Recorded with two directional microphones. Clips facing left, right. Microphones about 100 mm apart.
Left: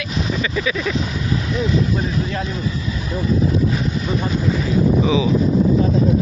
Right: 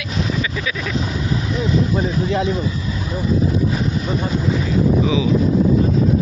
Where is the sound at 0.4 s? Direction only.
Centre (ahead or behind).